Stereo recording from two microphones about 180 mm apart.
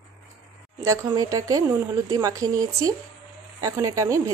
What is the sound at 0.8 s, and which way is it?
A woman's voice, 20° right (ahead or behind).